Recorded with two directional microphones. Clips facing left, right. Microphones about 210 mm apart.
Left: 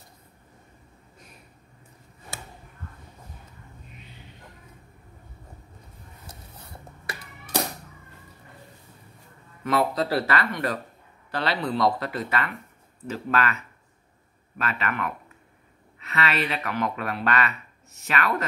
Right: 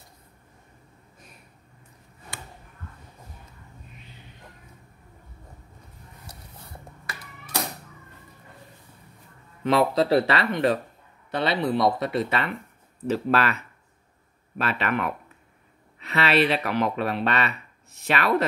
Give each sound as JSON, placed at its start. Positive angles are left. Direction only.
{"t": 9.6, "sound": "speech", "side_deg": -25}
{"t": 14.6, "sound": "speech", "side_deg": -35}